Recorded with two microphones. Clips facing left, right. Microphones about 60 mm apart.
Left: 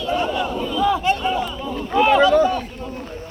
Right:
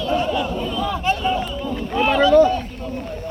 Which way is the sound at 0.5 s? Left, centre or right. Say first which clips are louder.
Left 4 dB; centre.